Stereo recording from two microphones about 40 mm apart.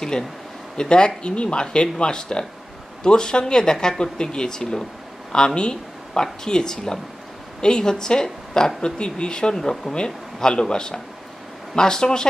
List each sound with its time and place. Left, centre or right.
0.7 s a woman's voice: left
9.6 s a man's voice: centre